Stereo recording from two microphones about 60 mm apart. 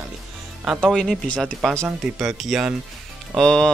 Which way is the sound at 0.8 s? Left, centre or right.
Centre.